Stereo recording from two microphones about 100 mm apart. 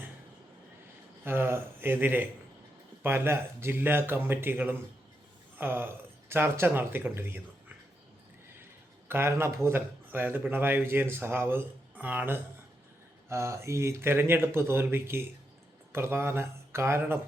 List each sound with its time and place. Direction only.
1.2 s speech: 20° right (ahead or behind)
9.0 s speech: 25° right (ahead or behind)